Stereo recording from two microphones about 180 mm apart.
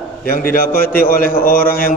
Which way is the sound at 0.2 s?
55° left (ahead or behind).